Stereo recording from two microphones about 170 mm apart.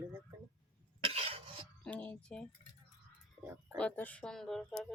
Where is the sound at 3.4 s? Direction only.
15° right (ahead or behind).